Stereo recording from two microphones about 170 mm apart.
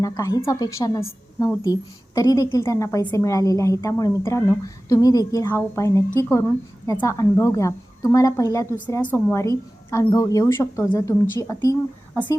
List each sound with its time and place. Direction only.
0.0 s a woman's voice: 20° left (ahead or behind)